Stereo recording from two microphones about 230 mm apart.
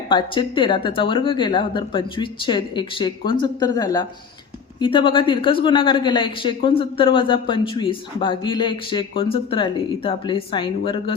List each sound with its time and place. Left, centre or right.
0.1 s speech: left